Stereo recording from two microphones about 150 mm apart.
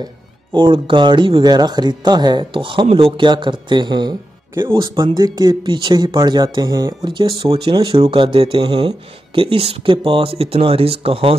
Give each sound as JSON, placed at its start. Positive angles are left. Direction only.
{"t": 0.0, "sound": "speech", "side_deg": -30}
{"t": 4.6, "sound": "speech", "side_deg": -15}
{"t": 5.0, "sound": "speech", "side_deg": -30}